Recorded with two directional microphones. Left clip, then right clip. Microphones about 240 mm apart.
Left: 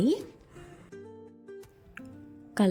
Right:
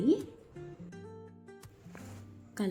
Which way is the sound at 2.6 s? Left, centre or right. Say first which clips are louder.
Left 9 dB; left.